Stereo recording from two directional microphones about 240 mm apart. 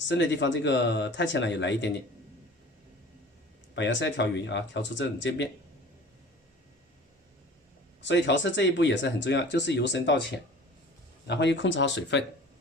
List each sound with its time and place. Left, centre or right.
0.1 s speech: left
3.8 s speech: left
8.0 s speech: left